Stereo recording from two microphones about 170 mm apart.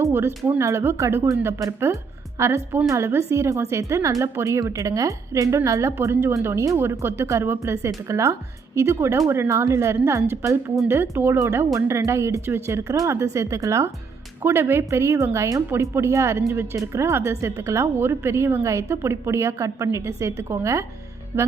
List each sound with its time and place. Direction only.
0.0 s speech: 15° right (ahead or behind)